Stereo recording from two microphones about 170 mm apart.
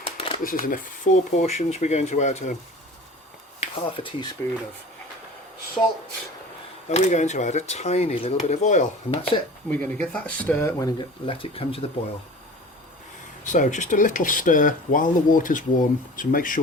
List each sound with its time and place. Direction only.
0.0 s shuffling cards: 30° left (ahead or behind)
0.4 s speech: 55° left (ahead or behind)
3.6 s speech: 35° left (ahead or behind)
6.9 s speech: 45° left (ahead or behind)
9.6 s speech: 10° left (ahead or behind)
11.3 s speech: 35° left (ahead or behind)
13.4 s speech: 50° left (ahead or behind)